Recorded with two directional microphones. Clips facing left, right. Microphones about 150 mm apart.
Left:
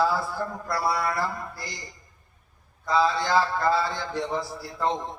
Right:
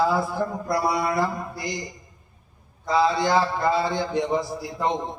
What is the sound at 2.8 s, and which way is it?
A man's voice, 15° right (ahead or behind).